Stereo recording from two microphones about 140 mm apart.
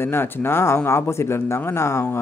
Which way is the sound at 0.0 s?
15° left (ahead or behind).